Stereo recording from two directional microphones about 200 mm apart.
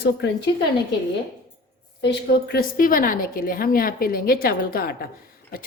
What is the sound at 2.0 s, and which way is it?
A woman's voice, 55° left (ahead or behind).